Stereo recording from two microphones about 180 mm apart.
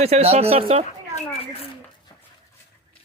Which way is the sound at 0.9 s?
35° left (ahead or behind).